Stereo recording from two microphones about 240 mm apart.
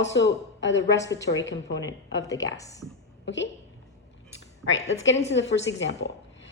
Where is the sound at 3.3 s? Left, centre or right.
Left.